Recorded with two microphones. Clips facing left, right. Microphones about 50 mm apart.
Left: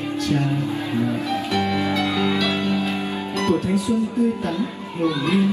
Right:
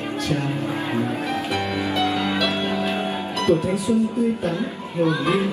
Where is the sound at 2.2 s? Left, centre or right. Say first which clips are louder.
Left 1 dB; right.